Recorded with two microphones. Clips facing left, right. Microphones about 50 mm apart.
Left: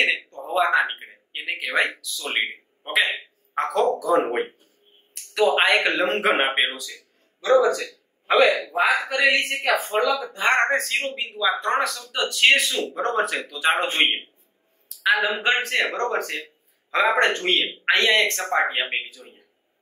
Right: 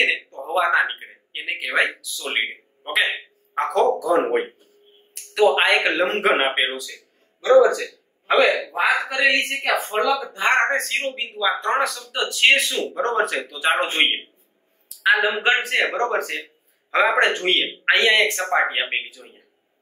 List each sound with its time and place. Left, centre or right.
0.0 s a man's voice: centre